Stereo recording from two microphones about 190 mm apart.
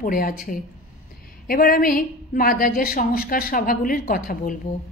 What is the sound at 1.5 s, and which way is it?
A woman's voice, 50° left (ahead or behind).